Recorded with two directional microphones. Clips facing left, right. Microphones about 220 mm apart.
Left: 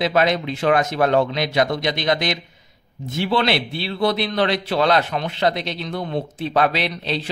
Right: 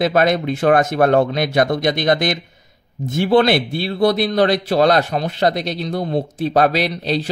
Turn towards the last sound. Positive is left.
turn(degrees=-40)  # may be behind; listen again after turning